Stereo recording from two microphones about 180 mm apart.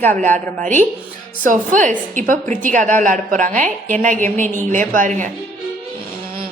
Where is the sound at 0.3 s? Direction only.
45° right (ahead or behind).